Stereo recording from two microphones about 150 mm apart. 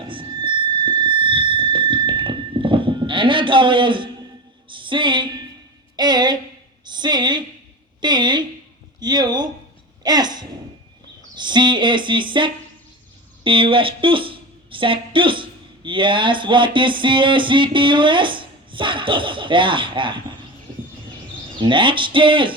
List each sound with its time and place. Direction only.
0.1 s squeal: 35° right (ahead or behind)
4.7 s music: 35° right (ahead or behind)
6.0 s a woman's voice: 30° right (ahead or behind)
10.0 s gasp: 25° right (ahead or behind)
11.3 s a woman's voice: 30° right (ahead or behind)
21.6 s speech: 35° right (ahead or behind)